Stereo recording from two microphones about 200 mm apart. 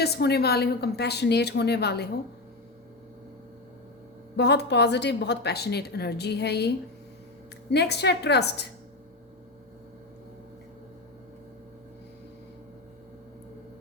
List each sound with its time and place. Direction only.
0.0 s a woman's voice: 55° left (ahead or behind)
4.4 s a woman's voice: 60° left (ahead or behind)
7.7 s a woman's voice: 55° left (ahead or behind)